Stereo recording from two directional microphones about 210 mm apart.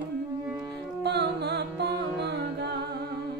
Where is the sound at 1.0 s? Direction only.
55° right (ahead or behind).